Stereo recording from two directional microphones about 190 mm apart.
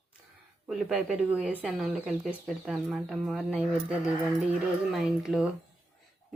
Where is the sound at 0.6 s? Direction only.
5° right (ahead or behind).